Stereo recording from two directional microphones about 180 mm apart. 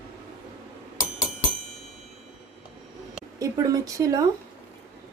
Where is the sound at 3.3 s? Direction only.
20° right (ahead or behind).